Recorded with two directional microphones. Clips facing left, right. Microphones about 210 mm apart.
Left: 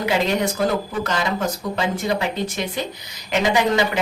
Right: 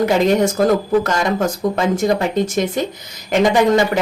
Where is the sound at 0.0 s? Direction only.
45° right (ahead or behind).